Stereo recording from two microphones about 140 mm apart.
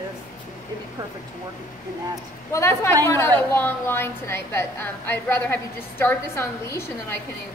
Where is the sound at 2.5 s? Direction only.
20° left (ahead or behind).